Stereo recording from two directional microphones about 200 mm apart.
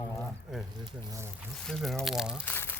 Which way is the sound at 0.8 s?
15° right (ahead or behind).